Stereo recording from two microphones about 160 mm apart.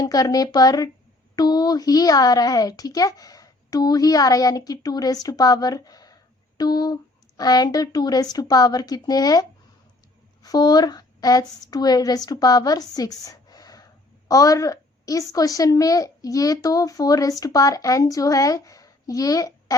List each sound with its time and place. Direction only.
0.0 s a woman's voice: 25° left (ahead or behind)